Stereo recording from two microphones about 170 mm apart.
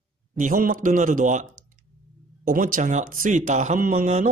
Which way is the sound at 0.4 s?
55° right (ahead or behind).